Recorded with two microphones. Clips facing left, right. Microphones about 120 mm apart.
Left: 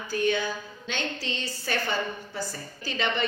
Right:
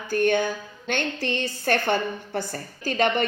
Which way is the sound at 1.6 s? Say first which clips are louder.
Right 6 dB; 60° right (ahead or behind).